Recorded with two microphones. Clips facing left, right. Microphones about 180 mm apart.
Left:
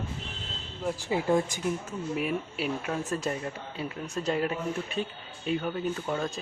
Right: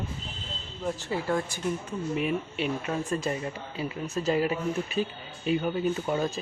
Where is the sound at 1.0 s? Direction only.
15° left (ahead or behind).